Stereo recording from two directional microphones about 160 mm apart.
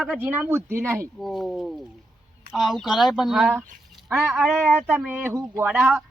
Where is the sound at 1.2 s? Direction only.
Centre (ahead or behind).